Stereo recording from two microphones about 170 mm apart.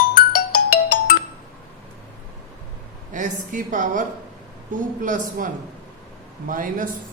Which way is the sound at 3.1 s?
50° right (ahead or behind).